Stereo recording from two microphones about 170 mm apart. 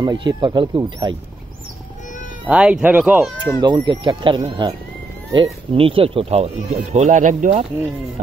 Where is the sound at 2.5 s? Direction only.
10° right (ahead or behind).